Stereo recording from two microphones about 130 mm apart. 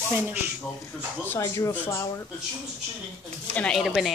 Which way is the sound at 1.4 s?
25° left (ahead or behind).